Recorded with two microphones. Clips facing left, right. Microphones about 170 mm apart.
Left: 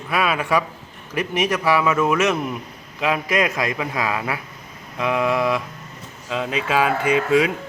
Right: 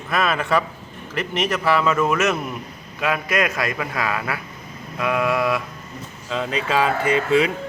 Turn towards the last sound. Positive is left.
turn(degrees=10)  # may be behind; listen again after turning